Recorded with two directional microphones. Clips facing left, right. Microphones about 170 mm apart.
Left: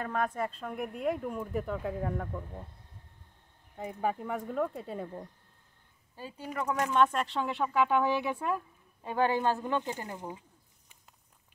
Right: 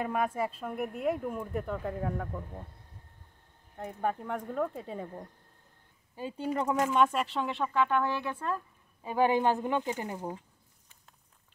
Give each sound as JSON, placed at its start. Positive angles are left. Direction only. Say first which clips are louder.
{"t": 0.0, "sound": "speech", "louder": "right 2 dB", "side_deg": -10}
{"t": 3.7, "sound": "speech", "louder": "even", "side_deg": 5}
{"t": 6.1, "sound": "speech", "louder": "right 5 dB", "side_deg": -25}
{"t": 9.0, "sound": "speech", "louder": "right 2 dB", "side_deg": -10}